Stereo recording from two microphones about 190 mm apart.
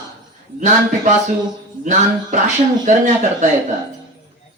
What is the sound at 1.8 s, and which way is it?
Speech, 40° right (ahead or behind).